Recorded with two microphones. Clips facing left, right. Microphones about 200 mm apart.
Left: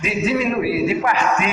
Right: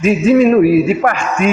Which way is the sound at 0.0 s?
45° right (ahead or behind).